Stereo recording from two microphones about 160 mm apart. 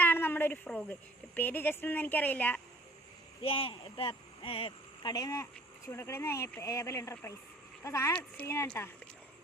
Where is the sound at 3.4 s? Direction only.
35° left (ahead or behind).